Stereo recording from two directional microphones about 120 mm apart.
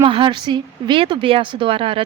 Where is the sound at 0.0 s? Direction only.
45° right (ahead or behind).